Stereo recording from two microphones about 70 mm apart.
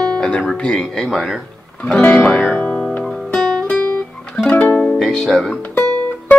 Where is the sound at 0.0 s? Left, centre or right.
Centre.